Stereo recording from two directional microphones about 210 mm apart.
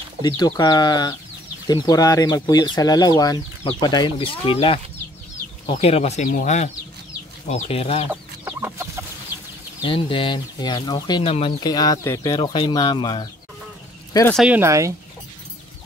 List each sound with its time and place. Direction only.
0.4 s speech: 20° left (ahead or behind)
8.1 s chicken: 10° right (ahead or behind)
9.8 s speech: 25° left (ahead or behind)
14.3 s speech: 5° right (ahead or behind)